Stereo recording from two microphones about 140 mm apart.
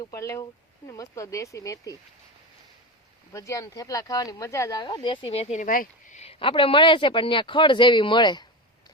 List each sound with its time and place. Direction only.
0.0 s speech: 20° left (ahead or behind)
3.3 s speech: 20° left (ahead or behind); by 5.6 s 50° left (ahead or behind)
5.6 s a sound: 75° left (ahead or behind); by 6.3 s 60° left (ahead or behind)
6.4 s speech: 40° left (ahead or behind)